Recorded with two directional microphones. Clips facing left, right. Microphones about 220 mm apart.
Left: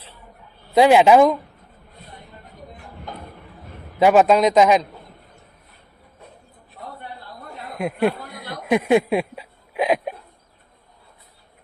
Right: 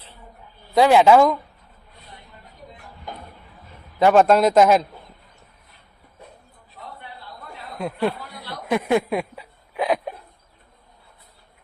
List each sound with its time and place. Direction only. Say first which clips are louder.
0.7 s speech: left 1 dB; 20° left (ahead or behind)
4.0 s a man's voice: left 1 dB; 5° left (ahead or behind)
7.8 s speech: left 3 dB; 15° left (ahead or behind)
8.8 s a sound: left 3 dB; 15° left (ahead or behind)